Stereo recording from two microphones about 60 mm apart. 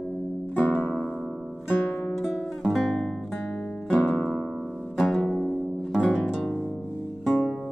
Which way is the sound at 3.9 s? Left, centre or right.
Left.